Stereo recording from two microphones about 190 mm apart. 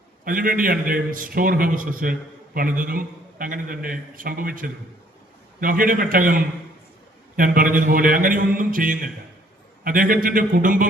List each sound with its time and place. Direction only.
0.3 s a man's voice: 45° right (ahead or behind)